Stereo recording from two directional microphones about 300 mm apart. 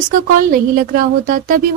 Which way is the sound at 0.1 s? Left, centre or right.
Right.